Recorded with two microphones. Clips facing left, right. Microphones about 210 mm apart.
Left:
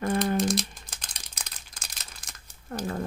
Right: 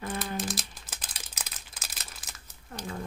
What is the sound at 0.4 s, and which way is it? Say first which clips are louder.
Crumpling: left 9 dB; 5° right (ahead or behind).